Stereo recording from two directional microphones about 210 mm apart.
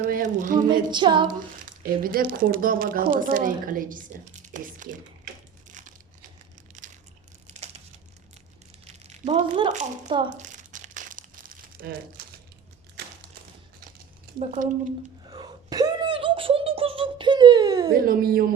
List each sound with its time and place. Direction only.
0.0 s speech: 35° right (ahead or behind)
0.7 s a sound: 20° right (ahead or behind)
1.8 s speech: 40° right (ahead or behind)
9.0 s speech: 35° right (ahead or behind)
10.2 s crumpling: 35° right (ahead or behind)
14.3 s speech: 35° right (ahead or behind)
15.3 s a sound: 20° right (ahead or behind)
17.9 s speech: 45° right (ahead or behind)